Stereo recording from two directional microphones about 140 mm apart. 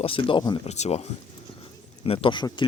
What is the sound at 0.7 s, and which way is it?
Speech, 50° left (ahead or behind).